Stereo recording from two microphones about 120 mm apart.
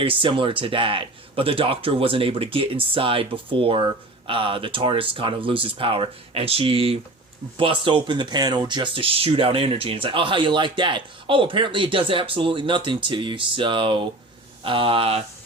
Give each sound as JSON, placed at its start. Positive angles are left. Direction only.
{"t": 0.0, "sound": "speech", "side_deg": -45}